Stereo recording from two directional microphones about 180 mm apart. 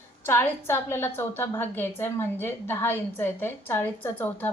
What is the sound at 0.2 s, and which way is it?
A woman's voice, 15° left (ahead or behind).